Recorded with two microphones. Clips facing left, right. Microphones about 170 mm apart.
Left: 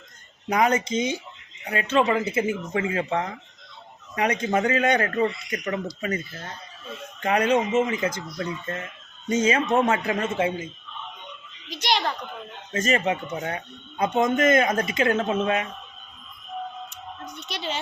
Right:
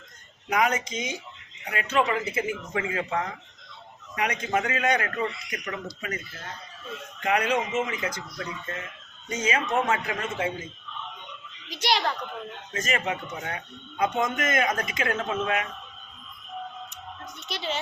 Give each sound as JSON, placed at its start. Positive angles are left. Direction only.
{"t": 0.4, "sound": "a man's voice", "side_deg": 30}
{"t": 7.2, "sound": "speech", "side_deg": 30}
{"t": 11.7, "sound": "a child's voice", "side_deg": -5}
{"t": 12.7, "sound": "speech", "side_deg": 30}
{"t": 17.5, "sound": "a child's voice", "side_deg": 0}